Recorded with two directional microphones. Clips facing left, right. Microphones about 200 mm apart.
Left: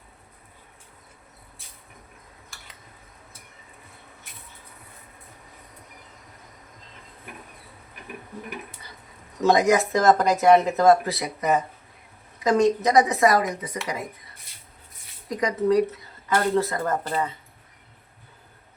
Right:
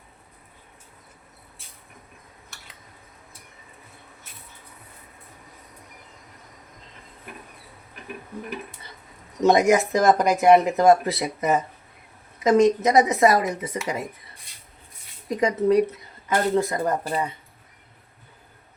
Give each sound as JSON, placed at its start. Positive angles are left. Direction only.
{"t": 9.4, "sound": "a woman's voice", "side_deg": -20}
{"t": 15.3, "sound": "a woman's voice", "side_deg": -25}